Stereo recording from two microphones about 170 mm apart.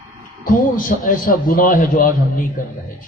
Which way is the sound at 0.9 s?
55° left (ahead or behind).